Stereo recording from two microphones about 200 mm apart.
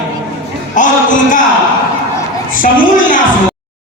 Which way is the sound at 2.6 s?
40° left (ahead or behind).